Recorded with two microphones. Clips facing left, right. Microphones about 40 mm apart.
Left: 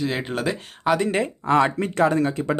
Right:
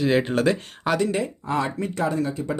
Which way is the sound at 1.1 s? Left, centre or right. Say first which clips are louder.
Left 5 dB; left.